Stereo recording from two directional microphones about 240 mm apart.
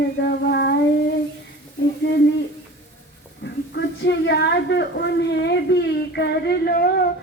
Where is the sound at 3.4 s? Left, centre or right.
Left.